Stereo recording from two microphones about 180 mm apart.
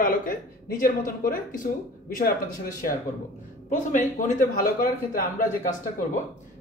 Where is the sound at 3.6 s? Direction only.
45° left (ahead or behind).